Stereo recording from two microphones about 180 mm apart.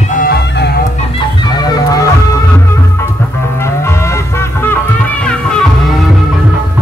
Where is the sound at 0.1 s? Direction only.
55° left (ahead or behind).